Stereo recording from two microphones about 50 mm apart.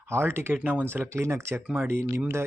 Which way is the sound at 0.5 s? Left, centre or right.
Right.